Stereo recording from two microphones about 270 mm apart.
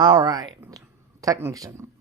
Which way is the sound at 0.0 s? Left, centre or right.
Centre.